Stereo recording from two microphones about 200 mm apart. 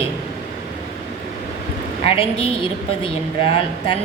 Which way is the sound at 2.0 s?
25° left (ahead or behind).